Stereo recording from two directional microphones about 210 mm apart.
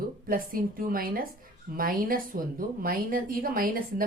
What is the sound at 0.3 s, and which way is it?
A woman's voice, 45° right (ahead or behind).